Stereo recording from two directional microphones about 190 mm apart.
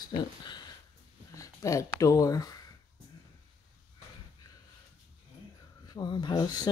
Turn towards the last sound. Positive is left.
turn(degrees=20)  # may be behind; listen again after turning